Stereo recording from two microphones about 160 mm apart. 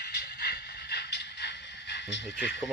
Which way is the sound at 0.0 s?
90° left.